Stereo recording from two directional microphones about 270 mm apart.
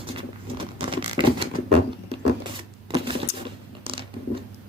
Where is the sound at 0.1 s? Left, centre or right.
Centre.